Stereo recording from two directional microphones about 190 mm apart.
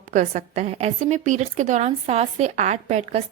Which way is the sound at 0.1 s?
40° right (ahead or behind).